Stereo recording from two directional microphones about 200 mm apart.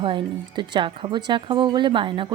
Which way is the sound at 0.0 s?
25° right (ahead or behind).